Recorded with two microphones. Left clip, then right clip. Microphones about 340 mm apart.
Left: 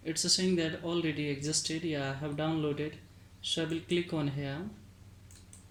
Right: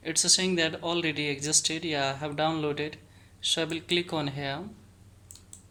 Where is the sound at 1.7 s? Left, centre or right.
Right.